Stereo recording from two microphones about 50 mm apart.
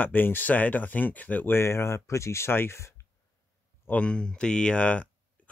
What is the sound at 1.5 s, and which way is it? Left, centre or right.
Speech, left.